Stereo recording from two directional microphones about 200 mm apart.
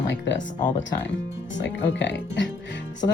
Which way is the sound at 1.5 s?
60° left (ahead or behind).